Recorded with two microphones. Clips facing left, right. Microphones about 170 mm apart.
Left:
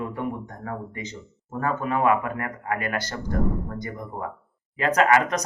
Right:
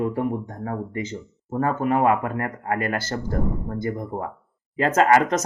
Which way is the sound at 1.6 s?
35° right (ahead or behind).